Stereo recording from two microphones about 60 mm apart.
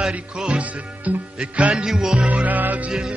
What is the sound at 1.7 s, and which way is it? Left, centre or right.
Music, centre.